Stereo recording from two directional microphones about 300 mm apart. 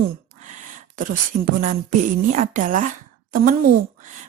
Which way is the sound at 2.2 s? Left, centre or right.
Right.